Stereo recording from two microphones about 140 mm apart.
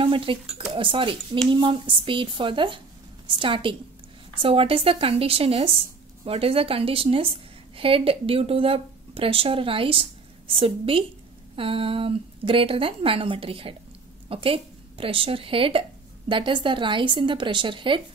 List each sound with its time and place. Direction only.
0.0 s a woman's voice: 40° right (ahead or behind)